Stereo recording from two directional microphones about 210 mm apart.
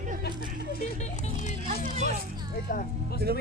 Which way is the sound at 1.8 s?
35° right (ahead or behind).